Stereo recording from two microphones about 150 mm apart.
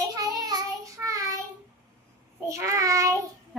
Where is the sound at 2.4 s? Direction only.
20° right (ahead or behind).